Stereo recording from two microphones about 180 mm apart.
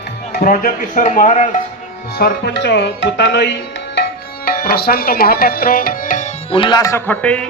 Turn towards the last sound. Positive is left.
turn(degrees=10)  # may be behind; listen again after turning